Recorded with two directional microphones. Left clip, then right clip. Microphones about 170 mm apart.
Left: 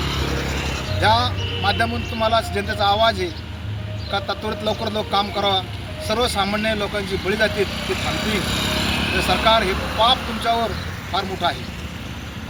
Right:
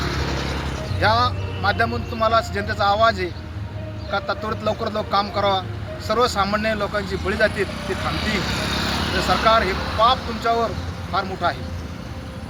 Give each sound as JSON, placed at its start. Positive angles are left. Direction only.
{"t": 0.0, "sound": "vehicle", "side_deg": 60}
{"t": 1.0, "sound": "speech", "side_deg": 0}
{"t": 7.9, "sound": "vehicle", "side_deg": 60}
{"t": 9.1, "sound": "speech", "side_deg": 0}